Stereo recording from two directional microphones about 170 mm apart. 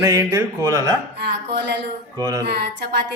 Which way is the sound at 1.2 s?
75° right (ahead or behind).